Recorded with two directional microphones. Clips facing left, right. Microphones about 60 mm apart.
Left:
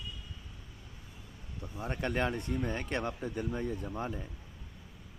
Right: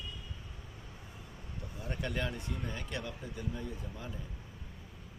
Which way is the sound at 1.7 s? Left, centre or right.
Left.